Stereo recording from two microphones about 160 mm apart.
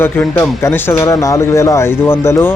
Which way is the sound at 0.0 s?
15° left (ahead or behind).